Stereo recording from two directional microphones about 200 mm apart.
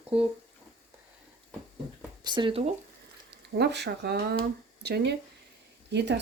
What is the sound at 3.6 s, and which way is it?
Speech, 55° right (ahead or behind).